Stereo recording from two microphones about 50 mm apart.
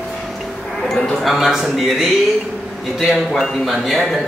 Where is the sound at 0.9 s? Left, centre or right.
Centre.